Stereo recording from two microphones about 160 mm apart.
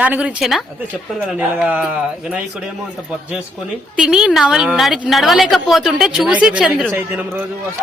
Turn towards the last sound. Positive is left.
turn(degrees=-15)  # may be behind; listen again after turning